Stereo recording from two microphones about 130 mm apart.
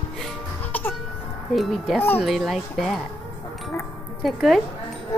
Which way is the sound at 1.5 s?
Centre (ahead or behind).